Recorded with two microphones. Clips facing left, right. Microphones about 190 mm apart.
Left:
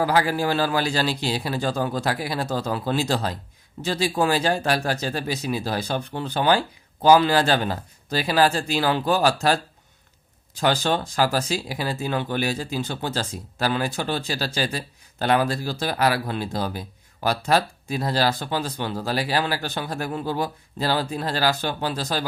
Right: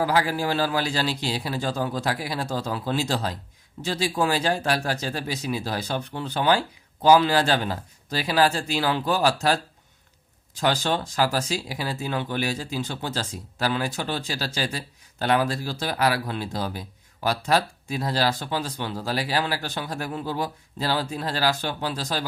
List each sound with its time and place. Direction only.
0.0 s a man's voice: 50° left (ahead or behind)
10.6 s speech: 45° left (ahead or behind)